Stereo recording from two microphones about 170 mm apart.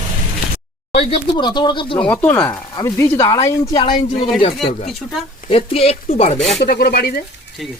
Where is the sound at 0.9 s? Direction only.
35° left (ahead or behind).